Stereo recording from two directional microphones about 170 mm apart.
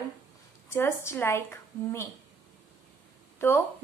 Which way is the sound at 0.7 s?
15° left (ahead or behind).